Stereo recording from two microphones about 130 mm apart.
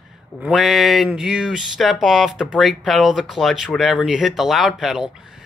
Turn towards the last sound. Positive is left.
turn(degrees=-5)  # may be behind; listen again after turning